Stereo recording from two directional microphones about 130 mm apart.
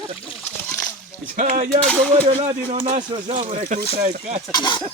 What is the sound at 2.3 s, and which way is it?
Speech, 50° right (ahead or behind).